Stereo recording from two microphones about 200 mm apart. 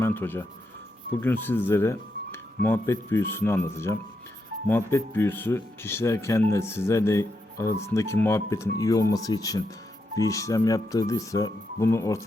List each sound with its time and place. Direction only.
0.0 s speech: 10° left (ahead or behind)